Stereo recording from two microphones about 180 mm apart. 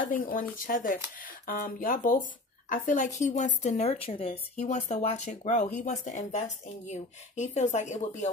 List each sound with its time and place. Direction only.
0.0 s speech: 50° left (ahead or behind)